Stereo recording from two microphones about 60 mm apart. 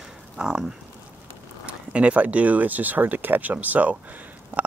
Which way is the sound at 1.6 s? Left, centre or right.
Centre.